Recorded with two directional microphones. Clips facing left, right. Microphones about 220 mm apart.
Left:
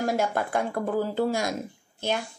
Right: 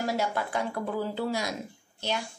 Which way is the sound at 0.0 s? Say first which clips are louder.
Left 3 dB; 50° left (ahead or behind).